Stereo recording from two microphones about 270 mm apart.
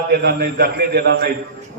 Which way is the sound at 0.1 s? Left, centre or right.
Right.